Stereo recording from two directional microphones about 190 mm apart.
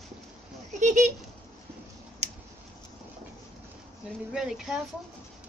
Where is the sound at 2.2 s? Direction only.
35° right (ahead or behind).